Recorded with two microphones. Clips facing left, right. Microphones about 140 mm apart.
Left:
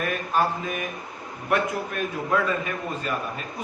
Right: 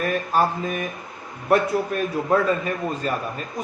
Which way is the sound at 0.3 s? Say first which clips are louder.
Right 2 dB; 35° right (ahead or behind).